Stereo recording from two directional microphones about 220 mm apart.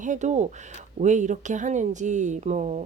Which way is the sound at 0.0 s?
35° right (ahead or behind).